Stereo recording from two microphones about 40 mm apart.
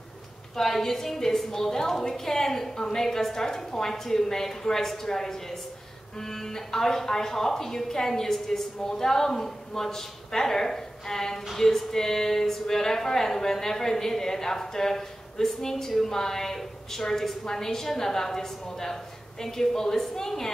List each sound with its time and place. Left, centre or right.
0.6 s a woman's voice: centre